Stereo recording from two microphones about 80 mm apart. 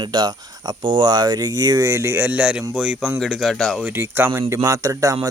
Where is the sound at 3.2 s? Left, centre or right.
Centre.